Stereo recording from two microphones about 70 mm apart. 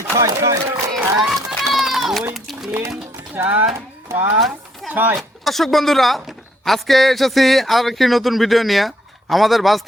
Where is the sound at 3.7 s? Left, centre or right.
Right.